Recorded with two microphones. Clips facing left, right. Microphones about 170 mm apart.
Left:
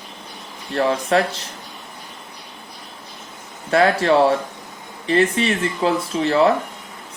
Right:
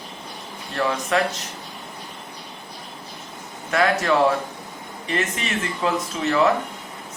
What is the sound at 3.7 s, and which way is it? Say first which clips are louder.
Speech: left 4 dB; 35° left (ahead or behind).